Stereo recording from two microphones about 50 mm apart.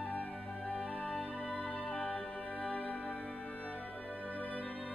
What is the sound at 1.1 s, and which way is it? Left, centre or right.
Music, left.